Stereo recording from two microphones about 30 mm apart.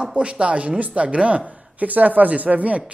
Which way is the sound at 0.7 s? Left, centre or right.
Right.